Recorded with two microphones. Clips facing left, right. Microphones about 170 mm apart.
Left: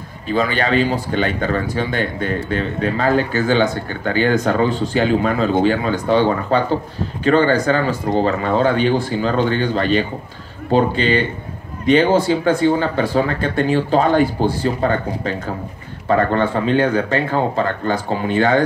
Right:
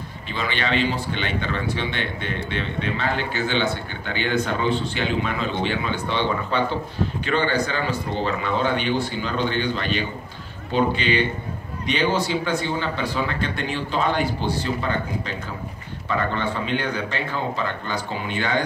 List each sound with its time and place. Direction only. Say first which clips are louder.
0.3 s speech: left 8 dB; 40° left (ahead or behind)